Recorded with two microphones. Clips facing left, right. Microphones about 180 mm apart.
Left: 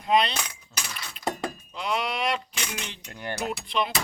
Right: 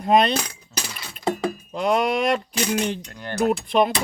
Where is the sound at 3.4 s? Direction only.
45° right (ahead or behind).